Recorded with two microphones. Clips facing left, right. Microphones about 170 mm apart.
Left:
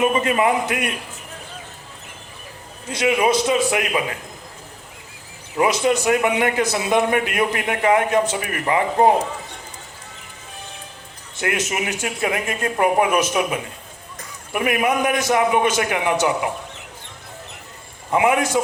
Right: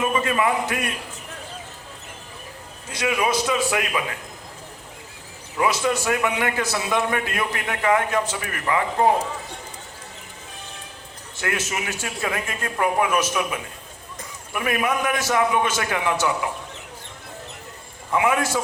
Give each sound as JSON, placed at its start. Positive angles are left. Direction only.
{"t": 0.0, "sound": "a man's voice", "side_deg": 20}
{"t": 2.9, "sound": "a man's voice", "side_deg": 20}
{"t": 5.5, "sound": "a man's voice", "side_deg": 20}
{"t": 11.3, "sound": "a man's voice", "side_deg": 20}
{"t": 18.1, "sound": "a man's voice", "side_deg": 20}